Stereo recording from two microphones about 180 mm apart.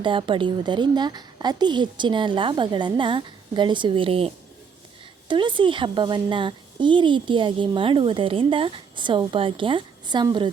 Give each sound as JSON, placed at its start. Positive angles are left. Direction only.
{"t": 0.0, "sound": "a woman's voice", "side_deg": -25}
{"t": 5.3, "sound": "a woman's voice", "side_deg": -25}